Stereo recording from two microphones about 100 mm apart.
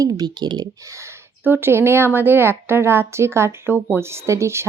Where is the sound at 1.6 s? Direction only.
25° right (ahead or behind).